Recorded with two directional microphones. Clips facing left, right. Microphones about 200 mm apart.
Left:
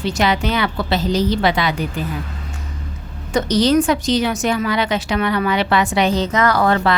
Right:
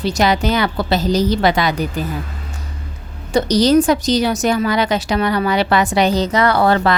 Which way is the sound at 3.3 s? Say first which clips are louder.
Right 2 dB; 40° right (ahead or behind).